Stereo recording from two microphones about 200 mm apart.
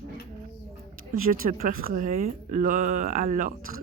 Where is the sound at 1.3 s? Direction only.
40° right (ahead or behind).